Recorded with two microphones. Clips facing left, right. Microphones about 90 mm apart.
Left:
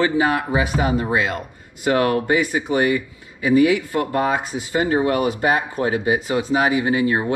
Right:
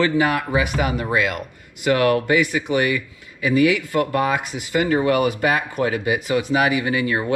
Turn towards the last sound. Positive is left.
turn(degrees=25)  # may be behind; listen again after turning